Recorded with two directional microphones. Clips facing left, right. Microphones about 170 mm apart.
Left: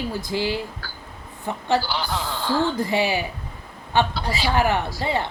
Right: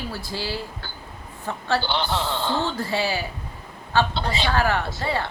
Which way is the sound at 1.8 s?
25° right (ahead or behind).